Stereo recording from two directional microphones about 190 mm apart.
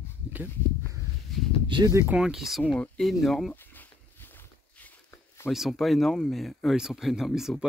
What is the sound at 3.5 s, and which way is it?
Walk, 10° left (ahead or behind).